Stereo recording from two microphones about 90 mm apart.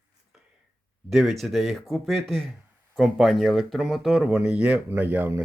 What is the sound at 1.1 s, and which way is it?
A man's voice, centre (ahead or behind).